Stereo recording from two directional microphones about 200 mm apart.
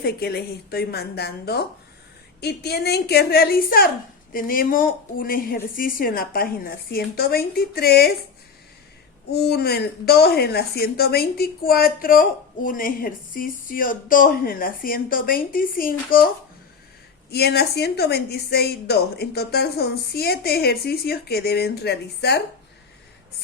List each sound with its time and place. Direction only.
0.0 s speech: 50° left (ahead or behind)
9.3 s speech: 55° left (ahead or behind)
17.3 s speech: 55° left (ahead or behind)